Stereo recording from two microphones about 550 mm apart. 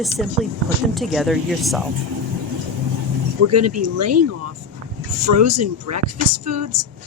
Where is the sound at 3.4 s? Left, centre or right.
Right.